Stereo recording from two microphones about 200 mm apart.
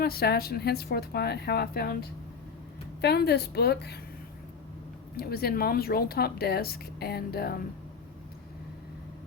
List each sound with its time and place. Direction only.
0.0 s speech: 50° left (ahead or behind)
5.1 s speech: 50° left (ahead or behind)